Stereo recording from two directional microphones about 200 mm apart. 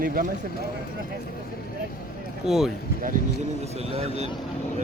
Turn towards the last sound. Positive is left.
turn(degrees=-30)  # may be behind; listen again after turning